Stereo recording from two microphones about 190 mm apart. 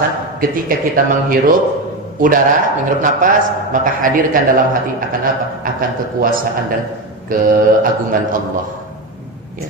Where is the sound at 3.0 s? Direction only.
45° right (ahead or behind).